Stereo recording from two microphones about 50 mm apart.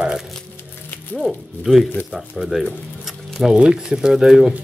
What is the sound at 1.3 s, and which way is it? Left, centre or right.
Speech, centre.